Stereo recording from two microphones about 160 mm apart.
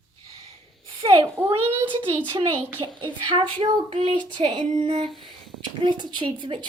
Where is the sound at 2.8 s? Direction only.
30° right (ahead or behind).